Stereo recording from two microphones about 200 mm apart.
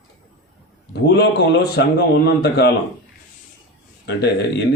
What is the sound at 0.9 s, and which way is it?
A man's voice, 55° left (ahead or behind).